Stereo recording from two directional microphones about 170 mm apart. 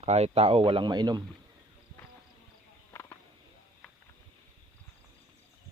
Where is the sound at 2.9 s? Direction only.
15° left (ahead or behind).